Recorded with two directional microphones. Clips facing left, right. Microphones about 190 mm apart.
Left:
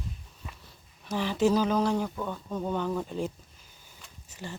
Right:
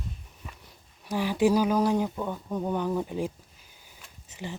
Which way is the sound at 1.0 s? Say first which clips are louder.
Right 2 dB; 10° right (ahead or behind).